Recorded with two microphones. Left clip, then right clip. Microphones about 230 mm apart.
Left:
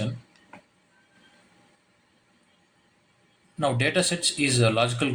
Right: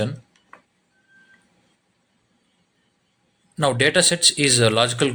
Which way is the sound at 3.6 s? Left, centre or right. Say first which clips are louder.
Right 6 dB; right.